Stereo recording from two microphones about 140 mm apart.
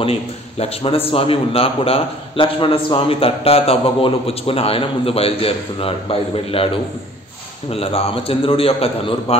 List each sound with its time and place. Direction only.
0.0 s a man's voice: 45° left (ahead or behind)